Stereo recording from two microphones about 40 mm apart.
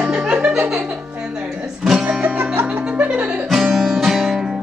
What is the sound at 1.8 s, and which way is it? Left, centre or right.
Music, centre.